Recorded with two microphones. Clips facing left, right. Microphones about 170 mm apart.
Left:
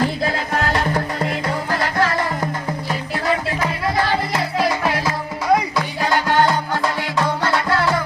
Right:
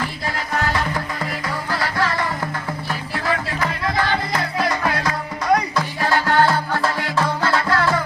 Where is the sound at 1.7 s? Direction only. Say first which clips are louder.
Left 2 dB; 45° left (ahead or behind).